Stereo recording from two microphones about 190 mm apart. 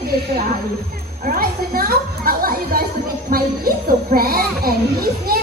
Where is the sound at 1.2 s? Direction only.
50° right (ahead or behind).